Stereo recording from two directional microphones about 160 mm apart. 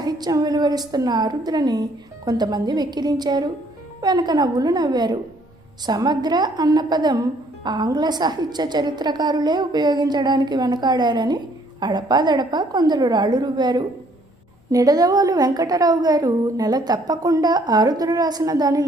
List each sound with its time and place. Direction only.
0.0 s speech: 25° right (ahead or behind)